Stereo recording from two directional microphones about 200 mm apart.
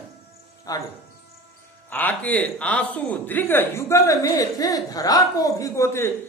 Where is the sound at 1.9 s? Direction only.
10° left (ahead or behind).